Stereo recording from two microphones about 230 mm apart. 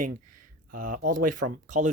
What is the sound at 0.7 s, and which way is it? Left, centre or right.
Speech, right.